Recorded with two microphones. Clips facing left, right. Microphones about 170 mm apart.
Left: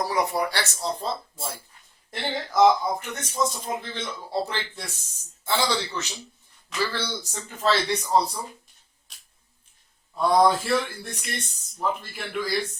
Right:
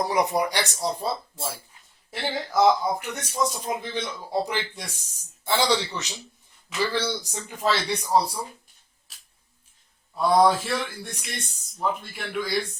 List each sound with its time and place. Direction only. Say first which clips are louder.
0.0 s speech: right 2 dB; 20° right (ahead or behind)
9.1 s a sound: right 1 dB; centre (ahead or behind)
10.2 s speech: even; centre (ahead or behind)